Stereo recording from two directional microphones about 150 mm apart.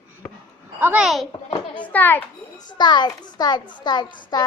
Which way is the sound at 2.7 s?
30° left (ahead or behind).